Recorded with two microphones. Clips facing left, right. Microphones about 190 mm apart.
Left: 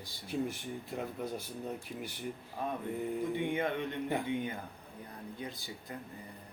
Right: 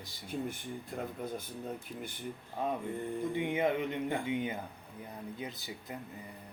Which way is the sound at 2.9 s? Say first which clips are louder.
Left 1 dB; 5° left (ahead or behind).